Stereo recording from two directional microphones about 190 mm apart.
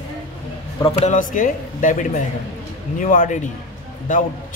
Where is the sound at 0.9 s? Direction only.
30° left (ahead or behind).